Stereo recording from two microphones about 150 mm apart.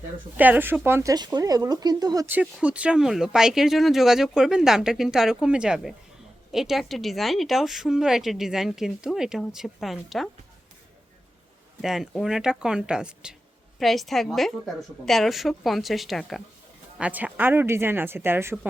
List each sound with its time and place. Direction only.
0.3 s a woman's voice: 10° right (ahead or behind)
1.1 s speech: 25° right (ahead or behind)
2.2 s speech: 10° right (ahead or behind)
11.8 s a woman's voice: centre (ahead or behind)